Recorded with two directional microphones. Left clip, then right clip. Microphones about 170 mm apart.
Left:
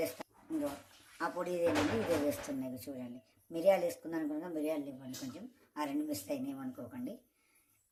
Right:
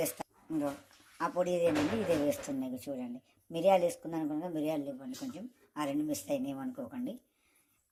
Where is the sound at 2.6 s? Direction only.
30° right (ahead or behind).